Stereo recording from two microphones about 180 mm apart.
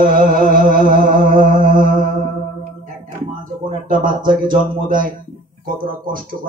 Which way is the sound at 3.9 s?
50° right (ahead or behind).